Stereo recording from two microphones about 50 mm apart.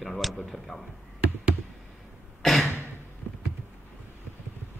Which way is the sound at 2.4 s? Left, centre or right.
Centre.